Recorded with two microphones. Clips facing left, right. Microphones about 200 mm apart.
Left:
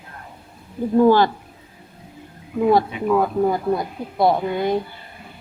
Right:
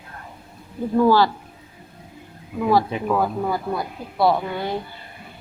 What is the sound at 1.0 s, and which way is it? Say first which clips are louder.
Speech: left 2 dB; 20° left (ahead or behind).